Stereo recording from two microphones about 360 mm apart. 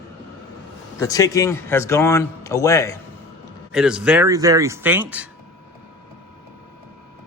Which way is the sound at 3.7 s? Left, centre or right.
Centre.